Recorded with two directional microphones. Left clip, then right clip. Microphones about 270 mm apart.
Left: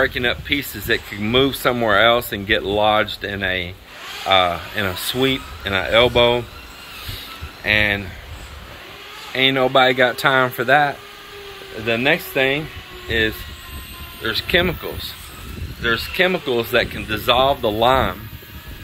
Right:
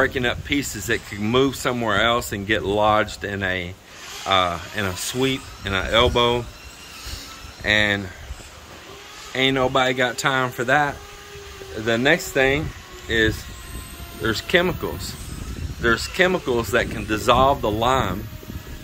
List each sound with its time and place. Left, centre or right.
0.0 s speech: centre
7.6 s speech: centre
9.3 s speech: centre
14.2 s speech: centre